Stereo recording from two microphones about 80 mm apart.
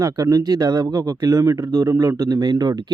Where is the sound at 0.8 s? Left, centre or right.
Right.